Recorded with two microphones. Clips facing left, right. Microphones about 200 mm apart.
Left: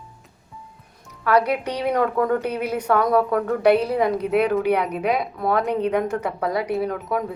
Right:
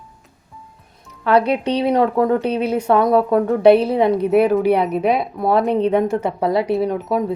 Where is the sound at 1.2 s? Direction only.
30° right (ahead or behind).